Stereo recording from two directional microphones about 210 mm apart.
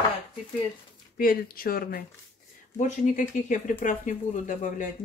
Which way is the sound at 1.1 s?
45° left (ahead or behind).